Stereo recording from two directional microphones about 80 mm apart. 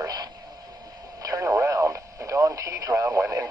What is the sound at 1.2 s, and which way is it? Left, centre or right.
Radio, right.